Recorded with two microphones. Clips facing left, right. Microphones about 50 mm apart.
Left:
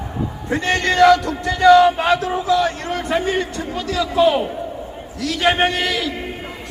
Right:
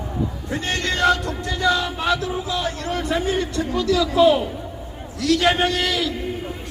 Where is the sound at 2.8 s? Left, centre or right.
Left.